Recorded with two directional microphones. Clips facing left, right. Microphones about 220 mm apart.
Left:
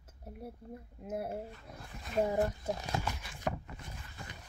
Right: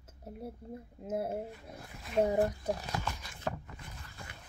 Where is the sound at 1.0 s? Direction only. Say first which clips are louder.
Right 3 dB; 25° right (ahead or behind).